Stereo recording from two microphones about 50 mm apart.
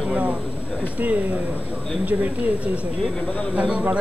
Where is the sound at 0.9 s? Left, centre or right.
Right.